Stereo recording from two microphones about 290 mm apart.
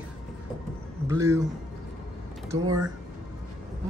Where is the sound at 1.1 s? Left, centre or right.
Centre.